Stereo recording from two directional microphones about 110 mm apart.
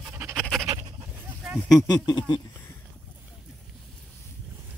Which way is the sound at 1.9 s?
40° left (ahead or behind).